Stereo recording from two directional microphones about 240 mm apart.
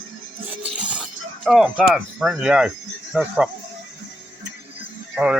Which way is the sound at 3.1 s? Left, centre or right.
Centre.